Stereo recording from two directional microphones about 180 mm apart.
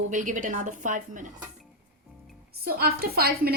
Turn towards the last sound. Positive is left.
turn(degrees=-55)  # may be behind; listen again after turning